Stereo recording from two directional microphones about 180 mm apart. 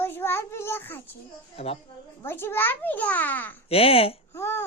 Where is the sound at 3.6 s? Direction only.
35° left (ahead or behind).